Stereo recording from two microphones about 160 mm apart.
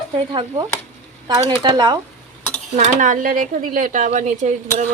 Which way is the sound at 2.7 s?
55° right (ahead or behind).